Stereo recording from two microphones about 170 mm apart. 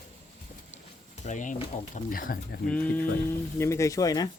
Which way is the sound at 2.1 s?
55° left (ahead or behind).